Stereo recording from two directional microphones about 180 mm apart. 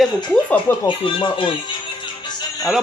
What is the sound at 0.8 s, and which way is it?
Speech, 25° left (ahead or behind).